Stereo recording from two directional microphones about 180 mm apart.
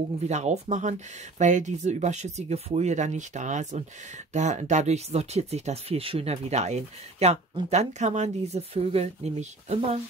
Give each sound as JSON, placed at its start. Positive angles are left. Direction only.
{"t": 0.3, "sound": "speech", "side_deg": -40}